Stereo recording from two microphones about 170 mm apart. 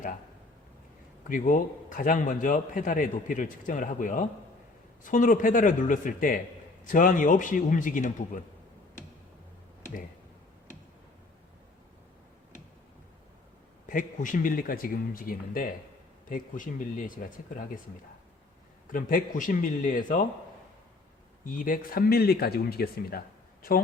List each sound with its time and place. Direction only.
1.3 s a man's voice: 50° left (ahead or behind)
13.8 s a man's voice: 50° left (ahead or behind)
18.9 s a man's voice: 50° left (ahead or behind)
21.4 s speech: 55° left (ahead or behind)